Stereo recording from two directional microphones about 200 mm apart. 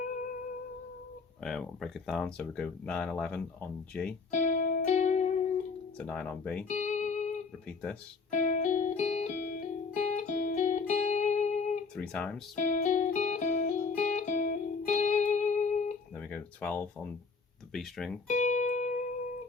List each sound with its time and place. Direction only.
1.4 s speech: centre (ahead or behind)
4.3 s music: 40° left (ahead or behind)
6.0 s speech: 5° left (ahead or behind)
6.7 s music: 35° left (ahead or behind)
8.3 s music: 40° left (ahead or behind)
11.9 s speech: 5° left (ahead or behind)
12.5 s music: 40° left (ahead or behind)
16.1 s a sound: 5° left (ahead or behind)
17.7 s speech: centre (ahead or behind)
18.3 s music: 35° left (ahead or behind)